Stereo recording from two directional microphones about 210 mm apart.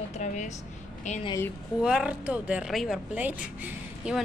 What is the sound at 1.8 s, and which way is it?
Speech, 5° right (ahead or behind).